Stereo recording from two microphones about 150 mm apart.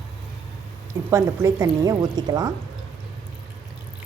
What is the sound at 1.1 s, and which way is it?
Speech, 20° right (ahead or behind).